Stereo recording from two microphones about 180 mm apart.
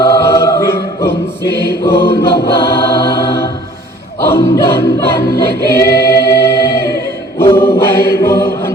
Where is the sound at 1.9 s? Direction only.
60° left (ahead or behind).